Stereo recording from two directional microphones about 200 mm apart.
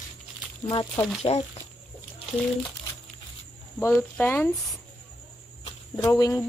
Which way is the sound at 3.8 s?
10° left (ahead or behind).